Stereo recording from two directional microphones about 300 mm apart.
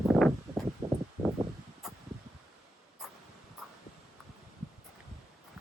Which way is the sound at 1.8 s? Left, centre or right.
Centre.